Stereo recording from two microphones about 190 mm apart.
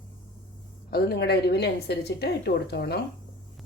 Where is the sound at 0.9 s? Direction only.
55° left (ahead or behind).